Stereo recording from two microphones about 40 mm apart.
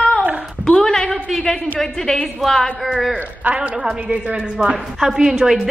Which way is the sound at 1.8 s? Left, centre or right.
Centre.